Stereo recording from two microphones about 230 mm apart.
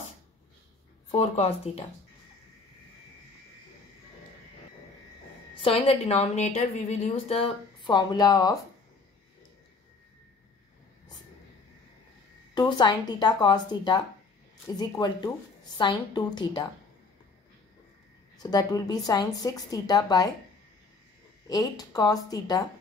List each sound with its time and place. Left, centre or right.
1.1 s a woman's voice: left
5.6 s a woman's voice: left
12.5 s a woman's voice: centre
18.4 s a woman's voice: centre
21.5 s a woman's voice: centre